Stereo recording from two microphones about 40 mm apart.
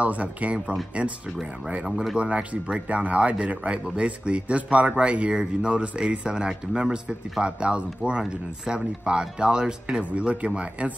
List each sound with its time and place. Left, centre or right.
0.0 s speech: right
5.3 s a man's voice: right
10.0 s speech: right